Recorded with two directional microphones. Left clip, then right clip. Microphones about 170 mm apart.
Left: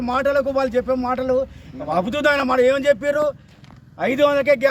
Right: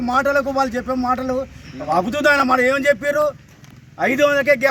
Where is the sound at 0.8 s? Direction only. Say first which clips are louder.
Even; 5° left (ahead or behind).